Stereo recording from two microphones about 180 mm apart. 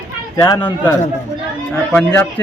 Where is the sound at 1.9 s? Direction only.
10° left (ahead or behind).